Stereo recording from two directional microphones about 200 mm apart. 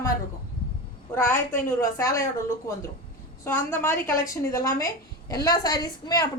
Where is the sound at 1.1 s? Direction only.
10° left (ahead or behind).